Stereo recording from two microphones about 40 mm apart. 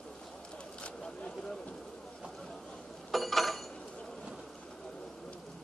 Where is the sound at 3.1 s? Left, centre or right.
Centre.